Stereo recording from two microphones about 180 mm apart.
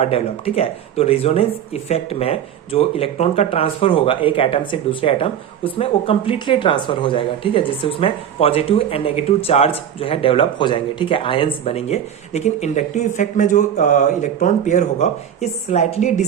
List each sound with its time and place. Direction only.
0.0 s a woman's voice: 35° left (ahead or behind)